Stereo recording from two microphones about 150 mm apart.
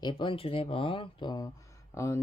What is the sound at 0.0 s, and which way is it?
Speech, 30° left (ahead or behind).